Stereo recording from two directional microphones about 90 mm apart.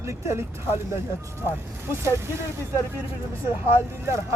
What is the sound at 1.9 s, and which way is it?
Speech, 30° right (ahead or behind).